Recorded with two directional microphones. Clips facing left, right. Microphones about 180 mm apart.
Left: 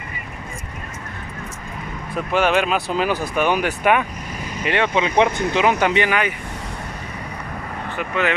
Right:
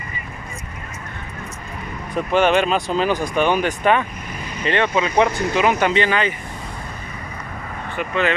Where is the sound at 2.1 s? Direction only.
5° left (ahead or behind).